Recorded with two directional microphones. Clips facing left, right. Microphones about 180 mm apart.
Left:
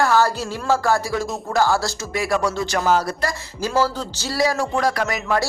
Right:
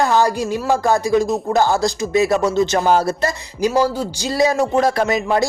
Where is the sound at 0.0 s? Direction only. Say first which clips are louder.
Right 2 dB; 15° right (ahead or behind).